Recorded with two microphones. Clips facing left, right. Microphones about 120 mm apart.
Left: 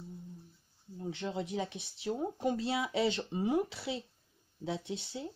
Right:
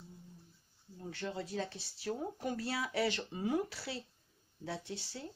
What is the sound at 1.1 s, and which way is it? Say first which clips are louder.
Speech: left 2 dB; 20° left (ahead or behind).